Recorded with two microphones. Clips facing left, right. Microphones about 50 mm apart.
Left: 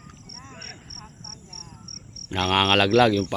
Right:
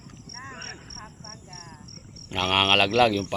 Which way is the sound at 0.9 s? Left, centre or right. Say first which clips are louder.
Right 1 dB; right.